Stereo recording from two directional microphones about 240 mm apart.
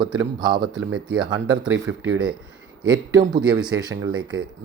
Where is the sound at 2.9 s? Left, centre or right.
Centre.